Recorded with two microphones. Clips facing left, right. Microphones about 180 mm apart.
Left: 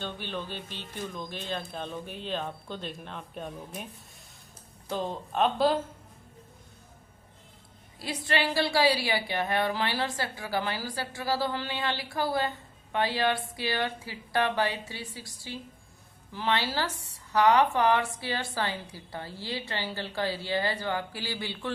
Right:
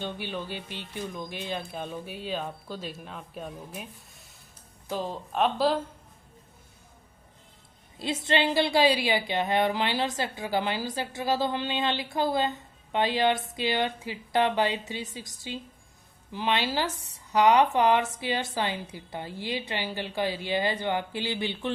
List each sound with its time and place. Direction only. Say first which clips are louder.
0.0 s a woman's voice: right 2 dB; 10° right (ahead or behind)
4.9 s speech: even; centre (ahead or behind)
7.9 s a woman's voice: right 3 dB; 25° right (ahead or behind)